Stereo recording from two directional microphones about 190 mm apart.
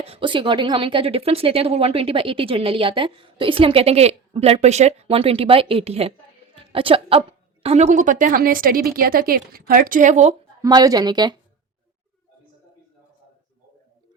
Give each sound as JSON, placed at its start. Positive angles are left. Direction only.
{"t": 0.0, "sound": "a woman's voice", "side_deg": -30}
{"t": 10.6, "sound": "a woman's voice", "side_deg": -20}